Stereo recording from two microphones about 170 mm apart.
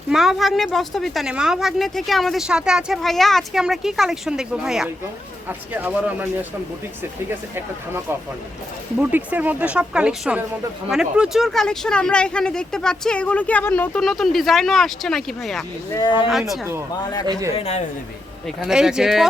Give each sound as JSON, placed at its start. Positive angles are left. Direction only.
{"t": 0.1, "sound": "a woman's voice", "side_deg": 0}
{"t": 9.0, "sound": "a woman's voice", "side_deg": -10}
{"t": 15.9, "sound": "speech", "side_deg": 25}
{"t": 16.3, "sound": "a woman's voice", "side_deg": 0}
{"t": 17.0, "sound": "speech", "side_deg": 25}
{"t": 17.5, "sound": "speech", "side_deg": 40}
{"t": 18.4, "sound": "a woman's voice", "side_deg": -5}